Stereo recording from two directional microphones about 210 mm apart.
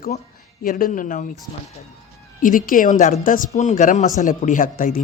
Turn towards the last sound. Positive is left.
turn(degrees=40)  # may be behind; listen again after turning